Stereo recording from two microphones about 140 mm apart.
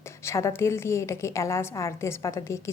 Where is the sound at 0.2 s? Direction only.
20° left (ahead or behind).